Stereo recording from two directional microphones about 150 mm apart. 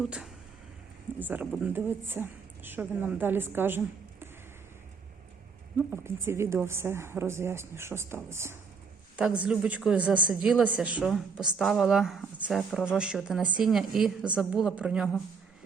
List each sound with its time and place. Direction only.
0.0 s a woman's voice: 5° right (ahead or behind)
5.7 s a woman's voice: 15° right (ahead or behind)